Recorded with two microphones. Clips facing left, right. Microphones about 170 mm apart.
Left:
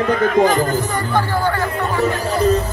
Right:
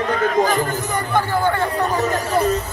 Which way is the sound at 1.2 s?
20° right (ahead or behind).